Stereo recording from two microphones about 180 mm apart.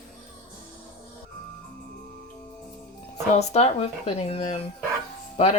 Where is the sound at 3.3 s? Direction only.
35° left (ahead or behind).